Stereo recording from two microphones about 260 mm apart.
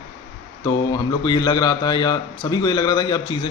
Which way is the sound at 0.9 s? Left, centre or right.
Centre.